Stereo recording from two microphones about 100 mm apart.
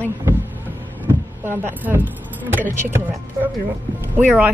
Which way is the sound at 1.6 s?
20° right (ahead or behind).